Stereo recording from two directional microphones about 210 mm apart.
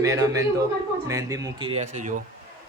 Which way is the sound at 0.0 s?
15° right (ahead or behind).